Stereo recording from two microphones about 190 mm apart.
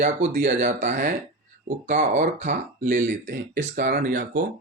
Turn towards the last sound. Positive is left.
turn(degrees=-50)  # may be behind; listen again after turning